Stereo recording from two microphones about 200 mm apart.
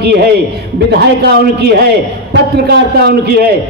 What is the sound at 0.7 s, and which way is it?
A man's voice, 55° right (ahead or behind).